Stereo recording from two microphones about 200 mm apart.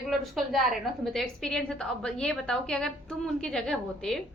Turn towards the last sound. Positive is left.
turn(degrees=5)  # may be behind; listen again after turning